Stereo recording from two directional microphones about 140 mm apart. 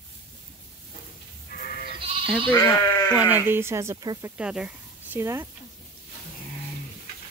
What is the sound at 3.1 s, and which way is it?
Speech, 10° right (ahead or behind).